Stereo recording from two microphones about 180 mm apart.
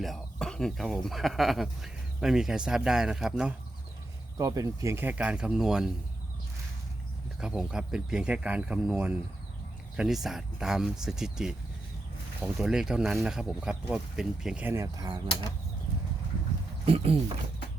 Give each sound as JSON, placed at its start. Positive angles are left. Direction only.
{"t": 0.0, "sound": "speech", "side_deg": 0}
{"t": 4.4, "sound": "speech", "side_deg": -20}
{"t": 7.3, "sound": "speech", "side_deg": -5}
{"t": 16.8, "sound": "speech", "side_deg": -35}